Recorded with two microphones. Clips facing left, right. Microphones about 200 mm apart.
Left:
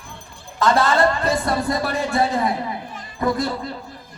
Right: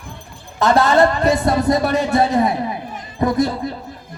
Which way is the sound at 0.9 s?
20° right (ahead or behind).